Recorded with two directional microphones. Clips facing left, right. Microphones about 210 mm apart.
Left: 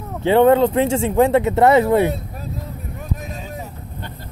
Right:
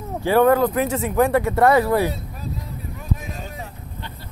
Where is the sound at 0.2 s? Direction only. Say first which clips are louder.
Left 3 dB; 25° left (ahead or behind).